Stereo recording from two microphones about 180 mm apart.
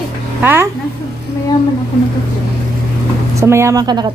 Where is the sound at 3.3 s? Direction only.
15° right (ahead or behind).